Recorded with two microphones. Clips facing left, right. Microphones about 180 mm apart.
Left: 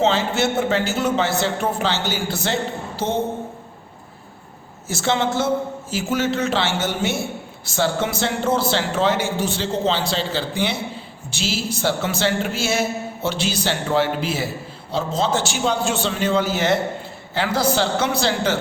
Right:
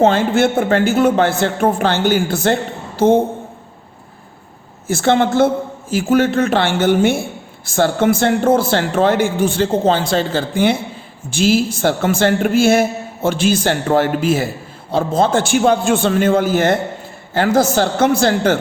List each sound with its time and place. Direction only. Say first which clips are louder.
0.0 s a woman's voice: right 6 dB; 55° right (ahead or behind)
4.9 s a woman's voice: right 7 dB; 55° right (ahead or behind)